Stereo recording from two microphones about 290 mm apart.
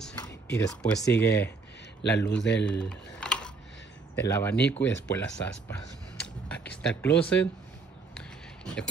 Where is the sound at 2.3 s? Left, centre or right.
Left.